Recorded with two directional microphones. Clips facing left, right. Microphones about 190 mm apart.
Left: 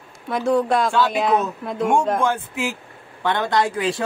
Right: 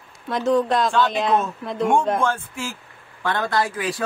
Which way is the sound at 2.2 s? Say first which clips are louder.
Left 2 dB; 15° left (ahead or behind).